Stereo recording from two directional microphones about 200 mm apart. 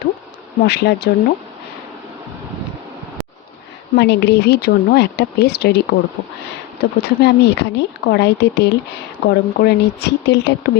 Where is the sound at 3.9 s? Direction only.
60° left (ahead or behind).